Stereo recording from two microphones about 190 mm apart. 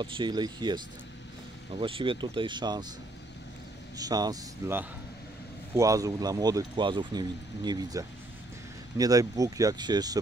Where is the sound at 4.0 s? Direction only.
20° right (ahead or behind).